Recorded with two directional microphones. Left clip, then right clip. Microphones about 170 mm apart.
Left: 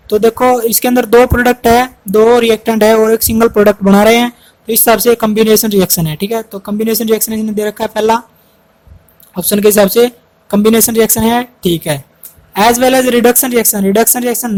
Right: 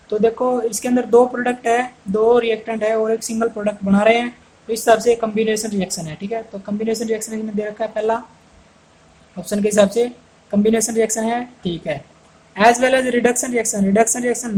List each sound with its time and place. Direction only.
0.1 s speech: 50° left (ahead or behind)
9.3 s speech: 50° left (ahead or behind)